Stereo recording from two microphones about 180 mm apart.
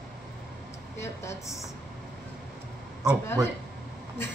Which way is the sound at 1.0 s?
15° left (ahead or behind).